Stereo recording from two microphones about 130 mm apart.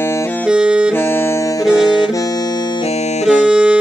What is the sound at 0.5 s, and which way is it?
Music, 5° right (ahead or behind).